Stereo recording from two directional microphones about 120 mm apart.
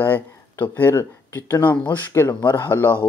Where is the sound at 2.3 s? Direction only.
40° left (ahead or behind).